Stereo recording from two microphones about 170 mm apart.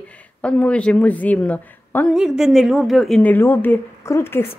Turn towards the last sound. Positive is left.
turn(degrees=15)  # may be behind; listen again after turning